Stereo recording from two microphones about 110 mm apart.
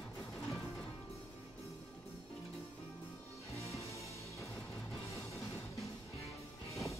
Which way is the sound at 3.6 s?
30° left (ahead or behind).